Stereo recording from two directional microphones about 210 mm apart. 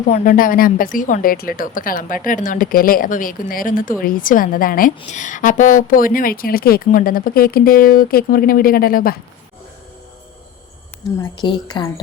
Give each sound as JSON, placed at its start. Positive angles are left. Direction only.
{"t": 0.1, "sound": "a woman's voice", "side_deg": 40}
{"t": 11.2, "sound": "a woman's voice", "side_deg": 20}